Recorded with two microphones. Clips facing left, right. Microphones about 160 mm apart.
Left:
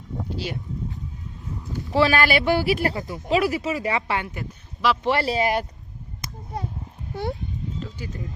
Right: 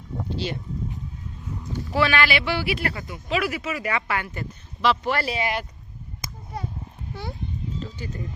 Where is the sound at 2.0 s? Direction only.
40° left (ahead or behind).